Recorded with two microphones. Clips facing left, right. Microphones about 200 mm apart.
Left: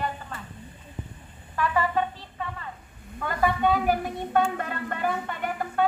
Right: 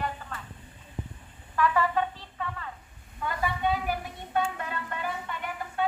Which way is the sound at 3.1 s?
55° left (ahead or behind).